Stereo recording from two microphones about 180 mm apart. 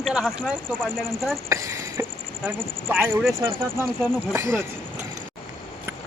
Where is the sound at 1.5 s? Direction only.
15° right (ahead or behind).